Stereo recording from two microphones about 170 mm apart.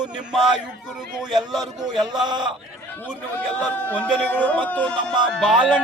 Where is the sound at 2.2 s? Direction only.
25° right (ahead or behind).